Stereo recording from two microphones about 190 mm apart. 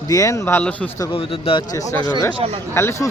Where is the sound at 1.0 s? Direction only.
30° left (ahead or behind).